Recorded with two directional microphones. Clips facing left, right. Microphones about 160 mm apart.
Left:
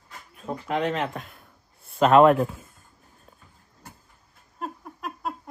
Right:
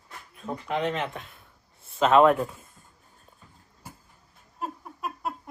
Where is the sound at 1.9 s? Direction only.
45° left (ahead or behind).